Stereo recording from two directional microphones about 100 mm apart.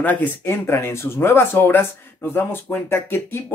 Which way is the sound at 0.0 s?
15° left (ahead or behind).